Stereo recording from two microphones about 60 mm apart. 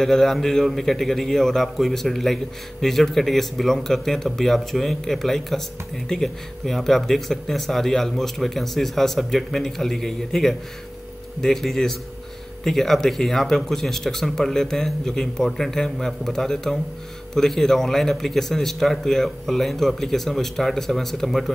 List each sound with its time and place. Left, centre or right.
0.0 s a man's voice: centre